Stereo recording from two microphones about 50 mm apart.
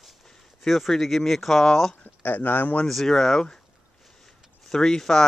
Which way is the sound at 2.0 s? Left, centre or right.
Left.